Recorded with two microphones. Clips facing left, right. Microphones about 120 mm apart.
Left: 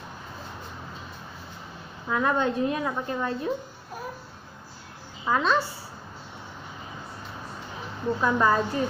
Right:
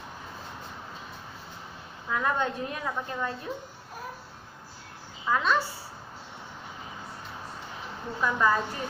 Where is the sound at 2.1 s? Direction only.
20° left (ahead or behind).